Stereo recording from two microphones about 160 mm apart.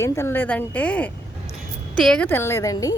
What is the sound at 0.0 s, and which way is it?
A woman's voice, 15° left (ahead or behind).